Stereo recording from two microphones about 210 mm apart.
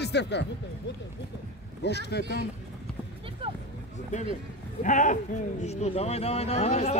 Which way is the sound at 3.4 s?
25° right (ahead or behind).